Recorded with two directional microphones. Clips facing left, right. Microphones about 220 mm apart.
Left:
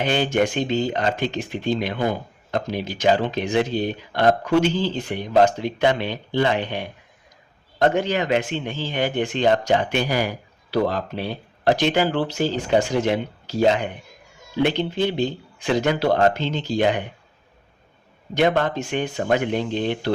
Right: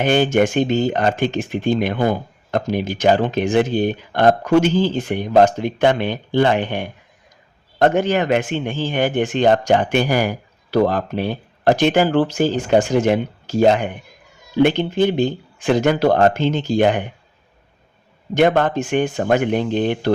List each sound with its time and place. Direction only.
0.0 s speech: 50° right (ahead or behind)
18.3 s speech: 50° right (ahead or behind)